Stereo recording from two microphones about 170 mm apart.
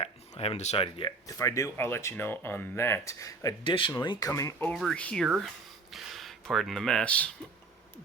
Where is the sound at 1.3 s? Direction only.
20° left (ahead or behind).